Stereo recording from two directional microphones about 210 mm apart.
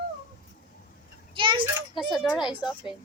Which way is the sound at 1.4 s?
25° right (ahead or behind).